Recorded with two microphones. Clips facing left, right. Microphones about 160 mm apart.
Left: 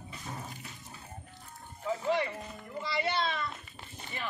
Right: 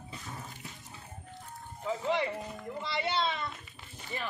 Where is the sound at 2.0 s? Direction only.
20° right (ahead or behind).